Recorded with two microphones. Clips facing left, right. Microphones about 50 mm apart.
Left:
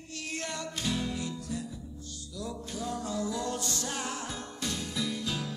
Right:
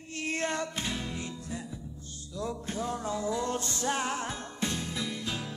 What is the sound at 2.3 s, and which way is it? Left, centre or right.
Music, right.